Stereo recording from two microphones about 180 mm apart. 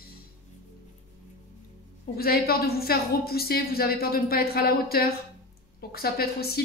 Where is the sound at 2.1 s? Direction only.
60° left (ahead or behind).